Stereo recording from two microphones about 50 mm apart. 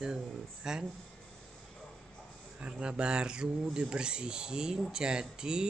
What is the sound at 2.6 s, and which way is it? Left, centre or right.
Speech, right.